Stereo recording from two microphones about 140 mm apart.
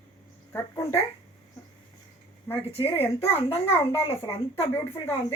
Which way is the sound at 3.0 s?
15° left (ahead or behind).